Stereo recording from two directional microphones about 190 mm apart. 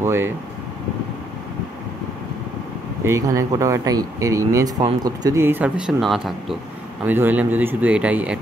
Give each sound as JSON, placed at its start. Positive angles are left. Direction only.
{"t": 0.0, "sound": "speech", "side_deg": -10}
{"t": 3.1, "sound": "speech", "side_deg": -15}